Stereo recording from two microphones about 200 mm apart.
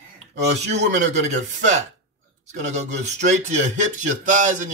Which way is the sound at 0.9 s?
35° right (ahead or behind).